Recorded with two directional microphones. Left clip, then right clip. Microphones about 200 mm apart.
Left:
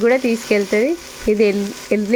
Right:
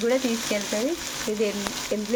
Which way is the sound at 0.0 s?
45° left (ahead or behind).